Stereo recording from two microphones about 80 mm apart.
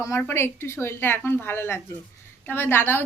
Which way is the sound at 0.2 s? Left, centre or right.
Left.